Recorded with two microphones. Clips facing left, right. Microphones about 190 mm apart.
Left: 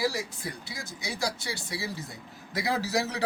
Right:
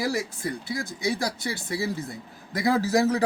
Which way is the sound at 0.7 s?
55° right (ahead or behind).